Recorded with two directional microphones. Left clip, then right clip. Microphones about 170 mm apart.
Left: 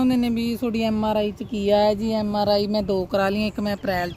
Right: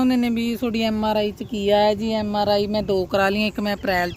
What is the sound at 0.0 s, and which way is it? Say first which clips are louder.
Speech: right 1 dB; centre (ahead or behind).